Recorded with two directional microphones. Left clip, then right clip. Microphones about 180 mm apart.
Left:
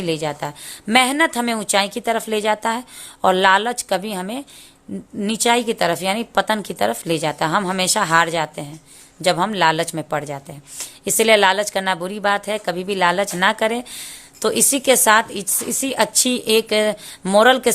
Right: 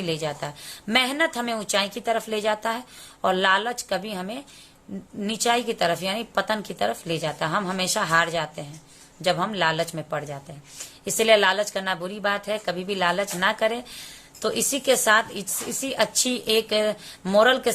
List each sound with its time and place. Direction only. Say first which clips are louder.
0.0 s a woman's voice: left 5 dB; 30° left (ahead or behind)